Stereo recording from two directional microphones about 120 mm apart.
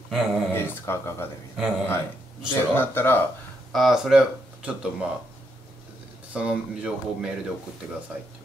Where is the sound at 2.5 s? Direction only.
20° left (ahead or behind).